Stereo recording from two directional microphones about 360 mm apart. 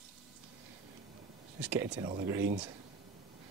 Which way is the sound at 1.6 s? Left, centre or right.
Centre.